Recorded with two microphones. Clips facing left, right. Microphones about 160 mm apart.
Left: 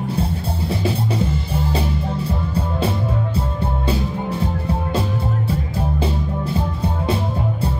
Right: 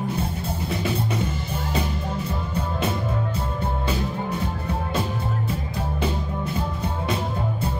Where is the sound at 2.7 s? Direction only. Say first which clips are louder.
Left 2 dB; 30° left (ahead or behind).